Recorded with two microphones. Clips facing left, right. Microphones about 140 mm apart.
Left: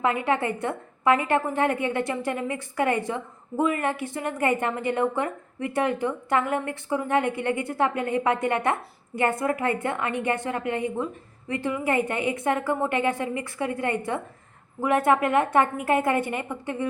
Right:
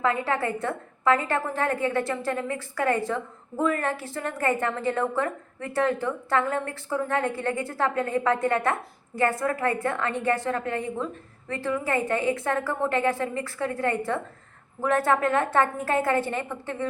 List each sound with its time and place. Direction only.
0.0 s a woman's voice: 20° left (ahead or behind)